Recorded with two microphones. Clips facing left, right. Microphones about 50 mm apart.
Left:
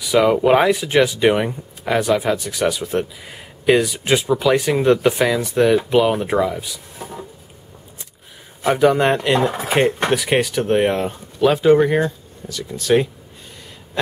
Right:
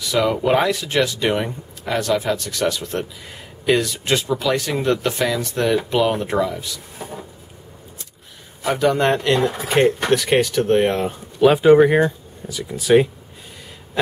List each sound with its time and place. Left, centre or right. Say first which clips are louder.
0.0 s speech: left 4 dB; centre
8.6 s speech: left 3 dB; centre
9.4 s speech: left 1 dB; centre
9.7 s speech: right 2 dB; centre
11.4 s speech: right 2 dB; centre